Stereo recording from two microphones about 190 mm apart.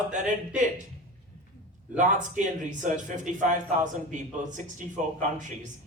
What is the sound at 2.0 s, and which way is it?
A man's voice, 40° right (ahead or behind).